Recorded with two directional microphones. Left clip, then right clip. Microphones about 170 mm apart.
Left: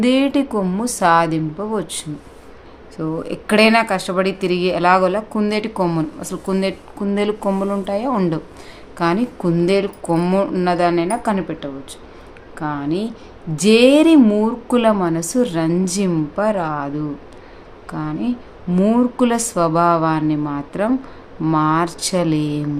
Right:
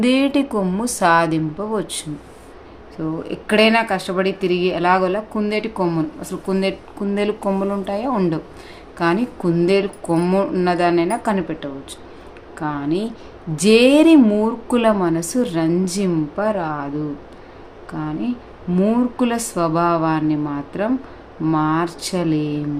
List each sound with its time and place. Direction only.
0.0 s a woman's voice: 5° left (ahead or behind)
3.0 s a woman's voice: 20° left (ahead or behind)
17.9 s speech: 20° left (ahead or behind)